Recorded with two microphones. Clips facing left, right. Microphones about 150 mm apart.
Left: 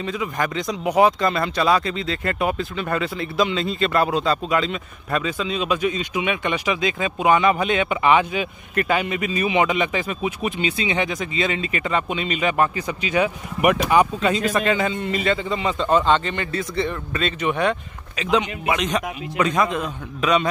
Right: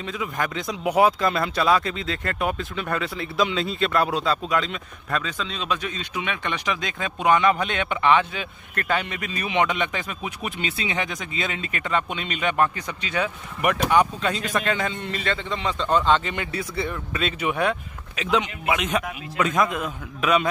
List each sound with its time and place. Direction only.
0.0 s speech: centre (ahead or behind)